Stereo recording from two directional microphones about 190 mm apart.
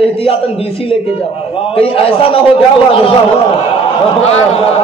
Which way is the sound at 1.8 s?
30° left (ahead or behind).